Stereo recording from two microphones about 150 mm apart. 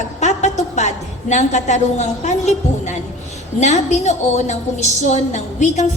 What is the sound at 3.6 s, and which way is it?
A woman's voice, 50° left (ahead or behind).